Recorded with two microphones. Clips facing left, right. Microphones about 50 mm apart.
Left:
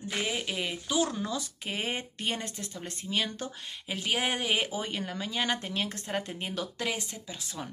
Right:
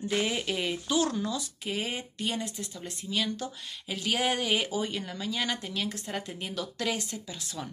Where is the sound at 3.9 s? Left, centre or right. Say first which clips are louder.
Right 1 dB; left.